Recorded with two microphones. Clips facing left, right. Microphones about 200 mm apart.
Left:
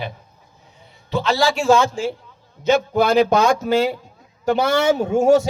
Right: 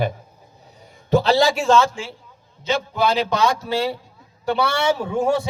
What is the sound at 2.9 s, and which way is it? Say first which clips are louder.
A man's voice: left 4 dB; 50° left (ahead or behind).